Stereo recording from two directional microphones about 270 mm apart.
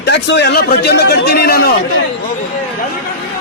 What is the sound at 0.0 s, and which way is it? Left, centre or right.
Speech, left.